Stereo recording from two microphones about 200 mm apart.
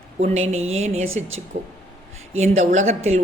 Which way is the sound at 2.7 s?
35° right (ahead or behind).